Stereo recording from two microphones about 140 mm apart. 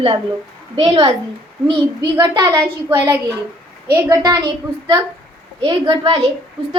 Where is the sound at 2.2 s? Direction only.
25° right (ahead or behind).